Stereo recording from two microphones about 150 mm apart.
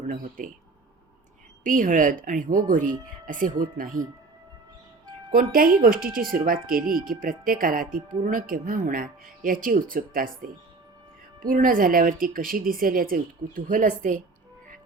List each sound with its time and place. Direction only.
0.0 s speech: 60° right (ahead or behind)
1.6 s speech: 65° right (ahead or behind)
5.3 s speech: 70° right (ahead or behind)